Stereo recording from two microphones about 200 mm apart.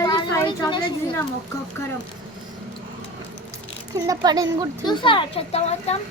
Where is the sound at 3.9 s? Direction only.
15° right (ahead or behind).